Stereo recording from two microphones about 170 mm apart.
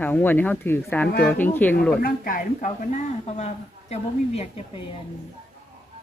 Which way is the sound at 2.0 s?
55° left (ahead or behind).